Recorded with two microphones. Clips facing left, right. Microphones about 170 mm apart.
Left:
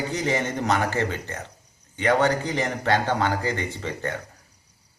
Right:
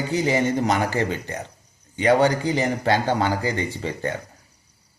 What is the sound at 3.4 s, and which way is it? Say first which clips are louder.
Speech: right 2 dB; 15° right (ahead or behind).